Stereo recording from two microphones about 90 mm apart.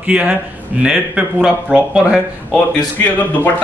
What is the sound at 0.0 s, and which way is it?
A man's voice, 15° right (ahead or behind).